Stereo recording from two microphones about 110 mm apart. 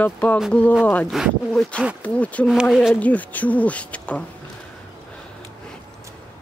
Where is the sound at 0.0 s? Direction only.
15° left (ahead or behind).